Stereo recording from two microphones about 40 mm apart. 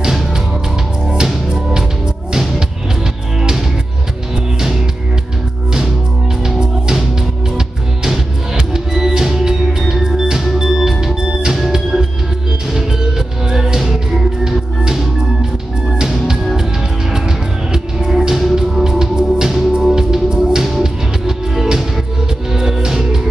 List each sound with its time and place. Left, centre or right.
0.0 s music: centre
1.5 s music: centre
3.3 s music: centre
6.4 s music: centre
17.7 s music: centre